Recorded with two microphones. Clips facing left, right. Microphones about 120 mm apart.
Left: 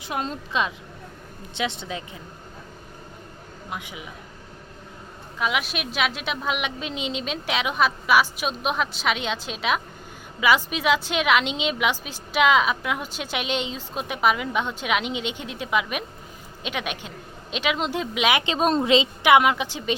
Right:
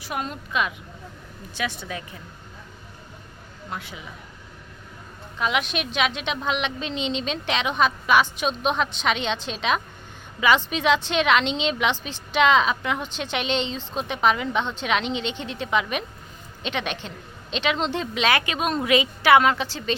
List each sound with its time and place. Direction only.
0.0 s a woman's voice: 25° left (ahead or behind)
3.7 s a woman's voice: 15° left (ahead or behind)
5.4 s a woman's voice: 5° left (ahead or behind)
18.4 s a woman's voice: 30° left (ahead or behind); by 20.0 s 15° left (ahead or behind)